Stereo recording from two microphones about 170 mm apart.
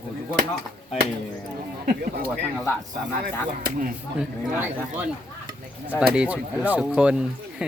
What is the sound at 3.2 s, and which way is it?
Speech, 60° right (ahead or behind).